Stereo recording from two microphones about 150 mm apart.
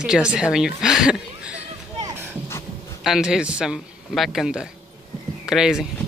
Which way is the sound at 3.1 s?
5° right (ahead or behind).